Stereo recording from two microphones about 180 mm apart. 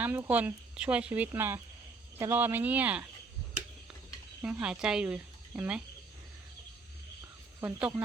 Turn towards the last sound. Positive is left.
turn(degrees=-15)  # may be behind; listen again after turning